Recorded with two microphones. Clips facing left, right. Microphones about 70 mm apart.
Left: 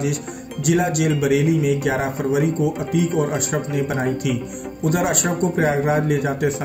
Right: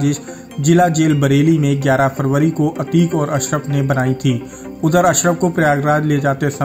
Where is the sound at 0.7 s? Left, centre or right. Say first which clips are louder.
Right 7 dB; right.